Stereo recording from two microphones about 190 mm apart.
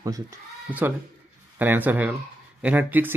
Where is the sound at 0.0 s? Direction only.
15° right (ahead or behind).